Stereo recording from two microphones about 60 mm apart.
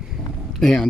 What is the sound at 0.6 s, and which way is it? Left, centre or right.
Speech, centre.